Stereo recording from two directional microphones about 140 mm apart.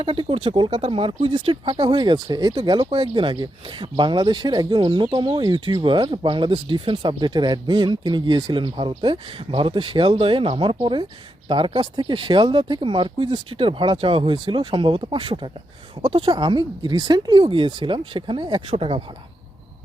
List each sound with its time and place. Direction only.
0.0 s speech: 40° right (ahead or behind)